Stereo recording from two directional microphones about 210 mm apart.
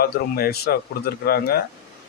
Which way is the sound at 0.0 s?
45° left (ahead or behind).